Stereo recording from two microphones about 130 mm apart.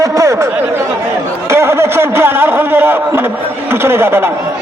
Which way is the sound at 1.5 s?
20° right (ahead or behind).